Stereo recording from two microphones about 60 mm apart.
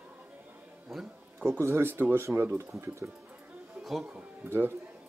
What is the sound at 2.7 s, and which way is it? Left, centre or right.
Speech, right.